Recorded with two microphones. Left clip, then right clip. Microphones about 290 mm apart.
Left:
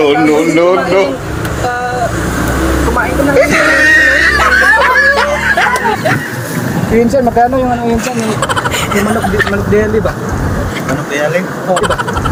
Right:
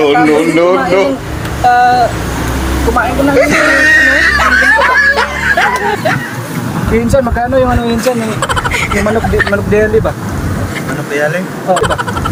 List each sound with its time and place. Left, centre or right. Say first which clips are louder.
0.0 s speech: right 1 dB; centre
3.3 s screaming: even; centre
11.7 s speech: right 1 dB; centre